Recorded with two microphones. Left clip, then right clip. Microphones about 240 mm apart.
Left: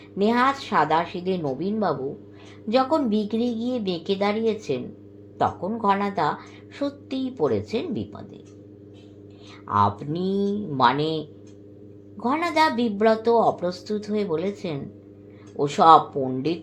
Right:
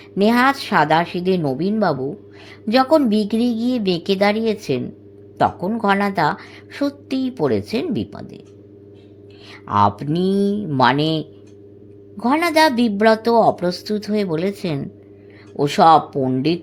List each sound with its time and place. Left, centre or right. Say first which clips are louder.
0.2 s a woman's voice: right 5 dB; right
9.6 s a woman's voice: right 5 dB; right